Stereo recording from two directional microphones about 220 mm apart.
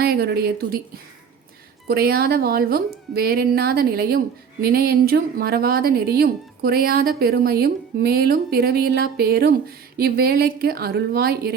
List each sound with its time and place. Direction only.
0.0 s speech: 45° right (ahead or behind)
1.9 s speech: 45° right (ahead or behind)